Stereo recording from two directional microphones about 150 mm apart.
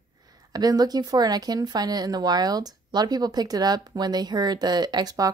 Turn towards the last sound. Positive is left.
turn(degrees=-25)  # may be behind; listen again after turning